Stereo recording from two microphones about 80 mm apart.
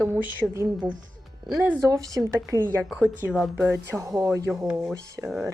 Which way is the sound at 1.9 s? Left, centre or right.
Right.